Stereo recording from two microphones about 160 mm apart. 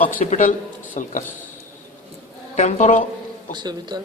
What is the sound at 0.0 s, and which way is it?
A man's voice, 60° left (ahead or behind).